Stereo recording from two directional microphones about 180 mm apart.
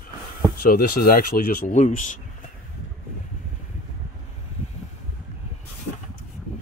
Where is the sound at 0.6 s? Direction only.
55° left (ahead or behind).